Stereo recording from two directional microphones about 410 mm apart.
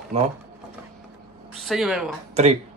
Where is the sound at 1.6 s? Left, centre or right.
Centre.